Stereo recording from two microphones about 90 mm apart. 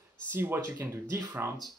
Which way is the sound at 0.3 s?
25° right (ahead or behind).